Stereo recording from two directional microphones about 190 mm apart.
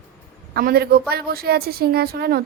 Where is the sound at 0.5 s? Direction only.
55° right (ahead or behind).